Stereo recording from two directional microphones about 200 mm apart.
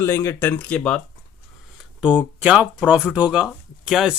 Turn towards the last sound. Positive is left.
turn(degrees=0)  # may be behind; listen again after turning